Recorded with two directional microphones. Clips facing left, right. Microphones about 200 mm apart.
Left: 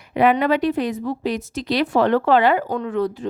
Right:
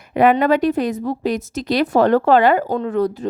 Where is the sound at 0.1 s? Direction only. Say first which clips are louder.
Right 3 dB; 45° right (ahead or behind).